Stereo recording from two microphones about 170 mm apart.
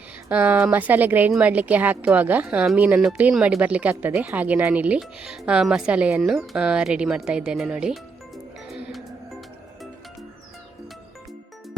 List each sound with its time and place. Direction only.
0.3 s speech: 10° right (ahead or behind)
8.7 s music: centre (ahead or behind)